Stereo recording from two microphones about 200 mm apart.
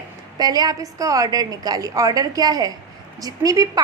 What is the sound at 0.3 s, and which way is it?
A woman's voice, 20° right (ahead or behind).